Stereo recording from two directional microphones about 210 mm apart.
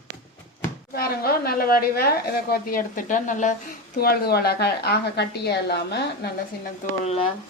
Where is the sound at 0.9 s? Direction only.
45° left (ahead or behind).